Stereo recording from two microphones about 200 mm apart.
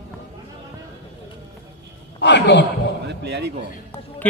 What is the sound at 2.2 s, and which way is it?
Speech, 60° left (ahead or behind).